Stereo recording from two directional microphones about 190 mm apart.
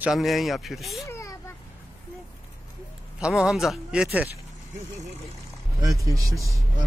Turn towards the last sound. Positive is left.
turn(degrees=0)  # may be behind; listen again after turning